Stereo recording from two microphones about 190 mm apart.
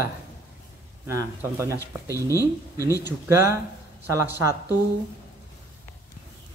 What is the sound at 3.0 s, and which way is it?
Speech, 15° right (ahead or behind).